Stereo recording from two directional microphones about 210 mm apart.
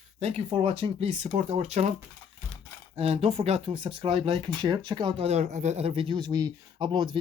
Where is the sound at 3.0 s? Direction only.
30° right (ahead or behind).